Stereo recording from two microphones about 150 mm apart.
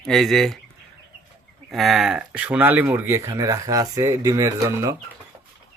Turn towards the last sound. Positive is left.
turn(degrees=-20)  # may be behind; listen again after turning